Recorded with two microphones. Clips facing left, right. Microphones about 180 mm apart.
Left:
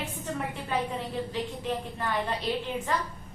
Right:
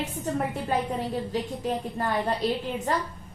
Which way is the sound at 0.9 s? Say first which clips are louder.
Right 3 dB; 40° right (ahead or behind).